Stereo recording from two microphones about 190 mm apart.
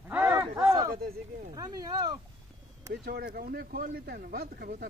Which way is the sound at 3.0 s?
55° right (ahead or behind).